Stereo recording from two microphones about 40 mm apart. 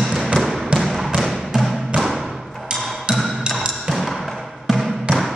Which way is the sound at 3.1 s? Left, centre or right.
Centre.